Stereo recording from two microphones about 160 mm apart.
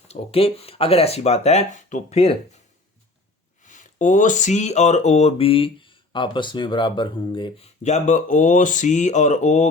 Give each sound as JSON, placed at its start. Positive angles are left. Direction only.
{"t": 0.1, "sound": "speech", "side_deg": 35}
{"t": 3.6, "sound": "speech", "side_deg": 50}
{"t": 7.8, "sound": "speech", "side_deg": 45}